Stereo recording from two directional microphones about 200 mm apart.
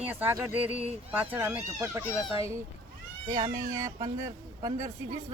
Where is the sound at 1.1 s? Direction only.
10° right (ahead or behind).